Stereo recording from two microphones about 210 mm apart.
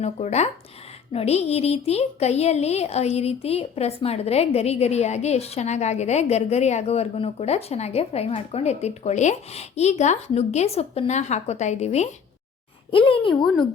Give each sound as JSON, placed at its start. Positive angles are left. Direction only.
{"t": 0.0, "sound": "a woman's voice", "side_deg": 30}
{"t": 13.3, "sound": "speech", "side_deg": 0}